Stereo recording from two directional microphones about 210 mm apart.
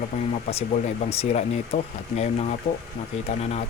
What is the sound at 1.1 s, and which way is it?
Speech, 30° left (ahead or behind).